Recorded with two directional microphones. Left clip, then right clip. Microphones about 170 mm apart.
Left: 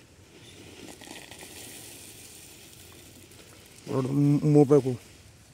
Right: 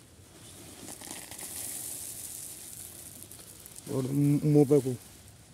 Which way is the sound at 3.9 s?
15° left (ahead or behind).